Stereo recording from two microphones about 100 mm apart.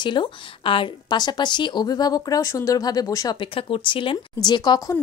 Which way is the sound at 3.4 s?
65° left (ahead or behind).